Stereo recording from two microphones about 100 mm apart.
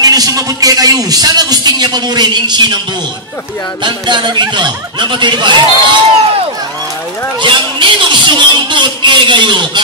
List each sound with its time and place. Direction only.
0.0 s a man's voice: 40° right (ahead or behind)
3.8 s speech: 50° right (ahead or behind)
7.3 s a sound: 55° right (ahead or behind)